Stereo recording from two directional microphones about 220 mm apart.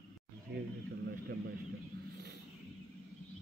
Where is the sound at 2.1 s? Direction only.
50° right (ahead or behind).